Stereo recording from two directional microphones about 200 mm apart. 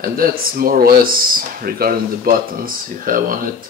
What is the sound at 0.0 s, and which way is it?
Speech, 45° right (ahead or behind).